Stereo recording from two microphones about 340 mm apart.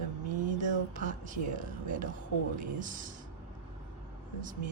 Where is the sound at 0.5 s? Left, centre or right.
Right.